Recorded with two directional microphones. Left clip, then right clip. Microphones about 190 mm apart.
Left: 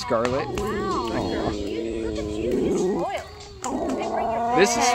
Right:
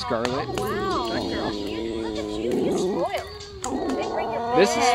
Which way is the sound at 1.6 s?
50° right (ahead or behind).